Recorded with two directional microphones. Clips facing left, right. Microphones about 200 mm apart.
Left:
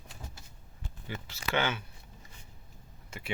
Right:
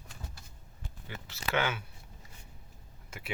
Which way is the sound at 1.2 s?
5° right (ahead or behind).